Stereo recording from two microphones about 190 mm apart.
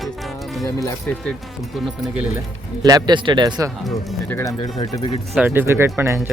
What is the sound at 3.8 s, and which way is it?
Speech, 10° left (ahead or behind).